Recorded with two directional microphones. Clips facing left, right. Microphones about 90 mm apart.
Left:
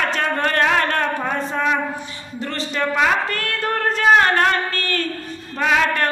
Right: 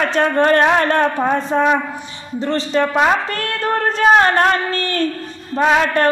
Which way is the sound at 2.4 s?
25° right (ahead or behind).